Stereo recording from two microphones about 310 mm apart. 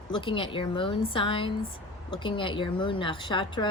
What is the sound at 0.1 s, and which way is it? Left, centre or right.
A woman's voice, centre.